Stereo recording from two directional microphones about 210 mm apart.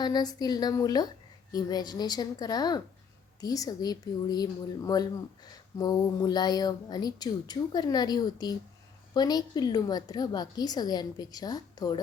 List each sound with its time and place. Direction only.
0.0 s speech: 20° left (ahead or behind)